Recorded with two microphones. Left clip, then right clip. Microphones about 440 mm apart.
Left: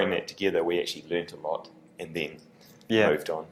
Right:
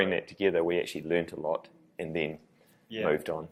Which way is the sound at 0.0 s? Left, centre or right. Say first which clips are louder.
Left 1 dB; right.